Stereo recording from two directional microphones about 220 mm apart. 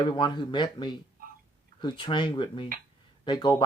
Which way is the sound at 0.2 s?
20° left (ahead or behind).